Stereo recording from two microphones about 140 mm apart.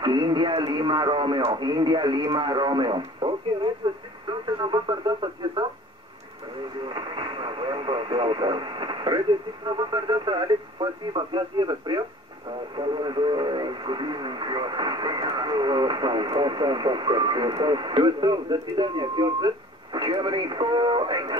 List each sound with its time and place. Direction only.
0.0 s speech: 30° right (ahead or behind)
4.3 s radio: 35° right (ahead or behind)
6.9 s radio: 35° right (ahead or behind)
9.7 s speech: 30° right (ahead or behind)